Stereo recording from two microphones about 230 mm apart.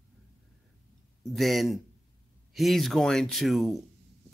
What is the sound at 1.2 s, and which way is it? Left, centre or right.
Speech, centre.